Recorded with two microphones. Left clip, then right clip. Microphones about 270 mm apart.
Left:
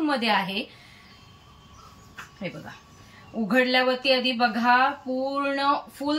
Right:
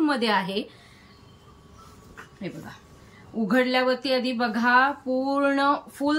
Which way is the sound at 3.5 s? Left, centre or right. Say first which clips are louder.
Left 1 dB; centre.